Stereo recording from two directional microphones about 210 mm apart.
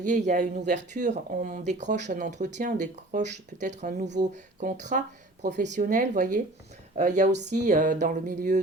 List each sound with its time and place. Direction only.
0.0 s speech: 35° right (ahead or behind)